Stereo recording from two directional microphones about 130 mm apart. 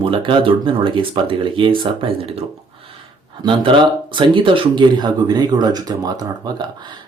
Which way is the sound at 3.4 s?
40° right (ahead or behind).